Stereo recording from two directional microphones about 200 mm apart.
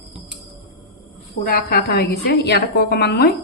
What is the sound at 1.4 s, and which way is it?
A woman's voice, 50° left (ahead or behind).